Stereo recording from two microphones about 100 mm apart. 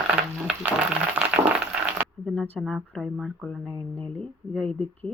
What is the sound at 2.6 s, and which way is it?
Speech, centre (ahead or behind).